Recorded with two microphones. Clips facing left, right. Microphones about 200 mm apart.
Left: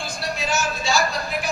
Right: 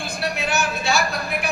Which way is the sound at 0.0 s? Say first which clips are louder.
Right 2 dB; 60° right (ahead or behind).